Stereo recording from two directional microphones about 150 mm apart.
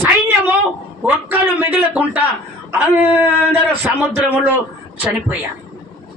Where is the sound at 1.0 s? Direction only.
10° right (ahead or behind).